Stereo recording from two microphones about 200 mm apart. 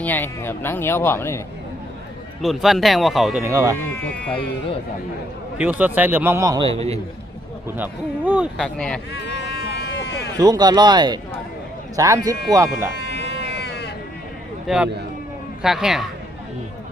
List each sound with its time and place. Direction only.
0.0 s speech: 10° left (ahead or behind)
2.4 s speech: centre (ahead or behind)
3.4 s a man's voice: 15° right (ahead or behind)
4.0 s speech: 5° left (ahead or behind)
5.5 s a man's voice: 10° right (ahead or behind); by 7.0 s 30° right (ahead or behind)
7.8 s a man's voice: 5° right (ahead or behind)
8.5 s speech: 5° left (ahead or behind)
9.1 s a sound: 60° left (ahead or behind)
10.3 s a man's voice: 20° right (ahead or behind)
13.0 s sheep: 60° left (ahead or behind)
14.7 s speech: centre (ahead or behind)